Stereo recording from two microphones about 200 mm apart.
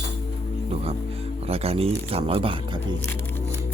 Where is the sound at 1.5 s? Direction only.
30° right (ahead or behind).